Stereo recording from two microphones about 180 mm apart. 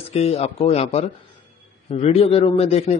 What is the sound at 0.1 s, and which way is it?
A man's voice, 35° left (ahead or behind).